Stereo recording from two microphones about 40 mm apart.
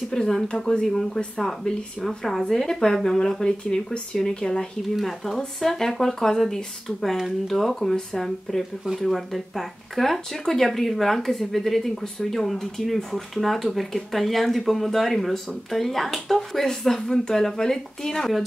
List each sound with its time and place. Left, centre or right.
0.1 s speech: centre
1.6 s speech: left
2.0 s speech: centre
4.9 s speech: centre